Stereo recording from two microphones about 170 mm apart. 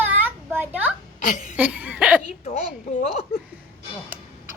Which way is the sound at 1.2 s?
50° left (ahead or behind).